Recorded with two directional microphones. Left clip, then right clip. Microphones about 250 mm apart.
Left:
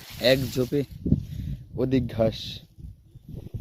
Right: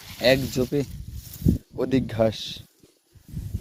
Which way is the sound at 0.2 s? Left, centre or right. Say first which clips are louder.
Right 1 dB; centre.